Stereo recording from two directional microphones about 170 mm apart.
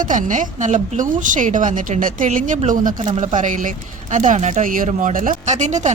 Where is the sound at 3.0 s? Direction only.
30° right (ahead or behind).